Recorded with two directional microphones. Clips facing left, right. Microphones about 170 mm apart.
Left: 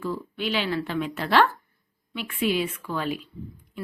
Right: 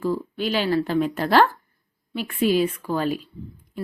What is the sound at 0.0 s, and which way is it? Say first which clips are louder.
Speech: right 5 dB; 40° right (ahead or behind).